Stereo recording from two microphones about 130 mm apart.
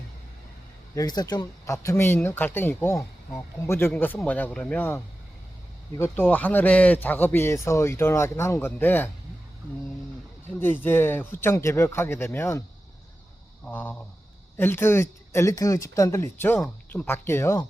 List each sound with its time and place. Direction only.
0.9 s speech: 30° left (ahead or behind)
10.6 s speech: 15° left (ahead or behind)
13.7 s speech: 15° left (ahead or behind)